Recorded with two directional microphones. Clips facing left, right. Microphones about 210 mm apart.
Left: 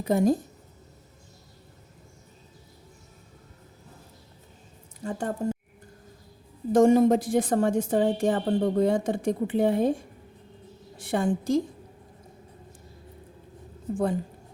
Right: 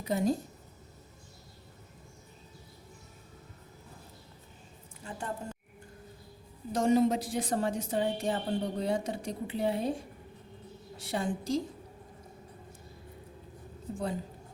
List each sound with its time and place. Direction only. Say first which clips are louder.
0.0 s a woman's voice: left 7 dB; 50° left (ahead or behind)
5.0 s a woman's voice: left 10 dB; 45° left (ahead or behind)
6.7 s a woman's voice: left 7 dB; 50° left (ahead or behind)
10.9 s a woman's voice: left 7 dB; 50° left (ahead or behind)
13.9 s a woman's voice: left 8 dB; 50° left (ahead or behind)